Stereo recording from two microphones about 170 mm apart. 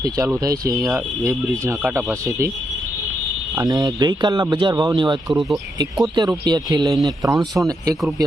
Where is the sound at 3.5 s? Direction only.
20° right (ahead or behind).